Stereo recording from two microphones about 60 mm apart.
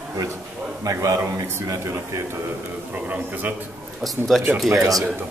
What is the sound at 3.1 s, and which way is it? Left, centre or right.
Speech, right.